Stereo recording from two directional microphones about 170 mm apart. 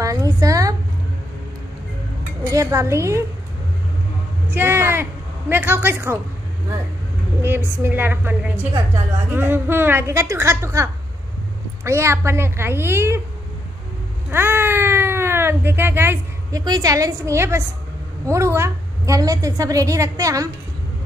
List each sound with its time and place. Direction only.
0.0 s a sound: 20° right (ahead or behind)
2.5 s a woman's voice: 15° right (ahead or behind)
4.5 s a woman's voice: 10° right (ahead or behind)
7.4 s a woman's voice: 15° right (ahead or behind)
14.3 s a sound: 15° right (ahead or behind)
16.6 s a woman's voice: 20° right (ahead or behind)